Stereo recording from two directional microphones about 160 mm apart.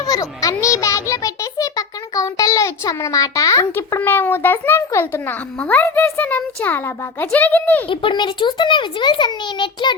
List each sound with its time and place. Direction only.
0.0 s a child's voice: 20° left (ahead or behind)
7.9 s a child's voice: 30° left (ahead or behind)